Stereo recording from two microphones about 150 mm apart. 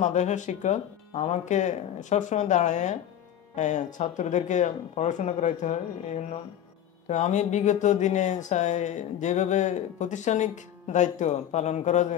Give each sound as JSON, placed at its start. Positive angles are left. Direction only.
{"t": 0.0, "sound": "speech", "side_deg": 50}
{"t": 7.1, "sound": "speech", "side_deg": 50}